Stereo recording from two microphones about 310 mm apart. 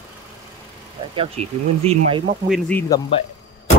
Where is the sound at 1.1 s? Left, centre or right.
Centre.